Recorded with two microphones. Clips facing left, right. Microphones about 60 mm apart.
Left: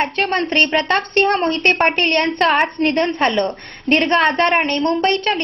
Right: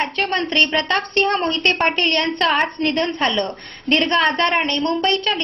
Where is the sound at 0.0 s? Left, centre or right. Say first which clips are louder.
Left 2 dB; left.